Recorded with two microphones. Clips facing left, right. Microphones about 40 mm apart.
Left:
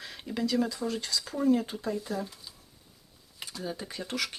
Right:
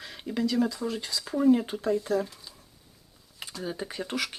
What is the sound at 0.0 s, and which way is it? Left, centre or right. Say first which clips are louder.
Speech: right 3 dB; centre.